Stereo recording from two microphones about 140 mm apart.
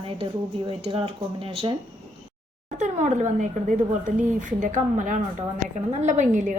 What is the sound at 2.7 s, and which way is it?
A woman's voice, 60° right (ahead or behind).